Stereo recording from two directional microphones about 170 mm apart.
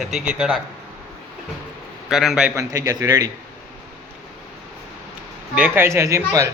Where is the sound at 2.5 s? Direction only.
20° right (ahead or behind).